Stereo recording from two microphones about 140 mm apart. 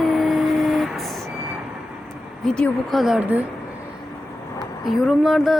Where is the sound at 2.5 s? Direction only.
5° left (ahead or behind); by 3.4 s 10° right (ahead or behind).